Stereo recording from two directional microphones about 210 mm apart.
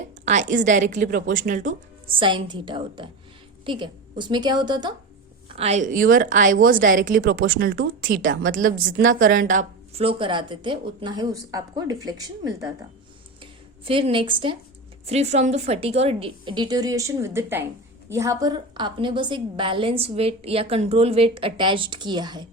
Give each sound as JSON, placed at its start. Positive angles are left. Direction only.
{"t": 0.3, "sound": "a woman's voice", "side_deg": -35}
{"t": 2.0, "sound": "a woman's voice", "side_deg": -25}
{"t": 5.5, "sound": "a woman's voice", "side_deg": -30}
{"t": 13.4, "sound": "a sound", "side_deg": -25}
{"t": 15.0, "sound": "a woman's voice", "side_deg": -30}